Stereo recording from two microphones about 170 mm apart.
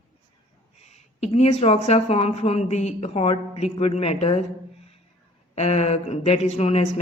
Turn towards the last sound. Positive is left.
turn(degrees=40)  # may be behind; listen again after turning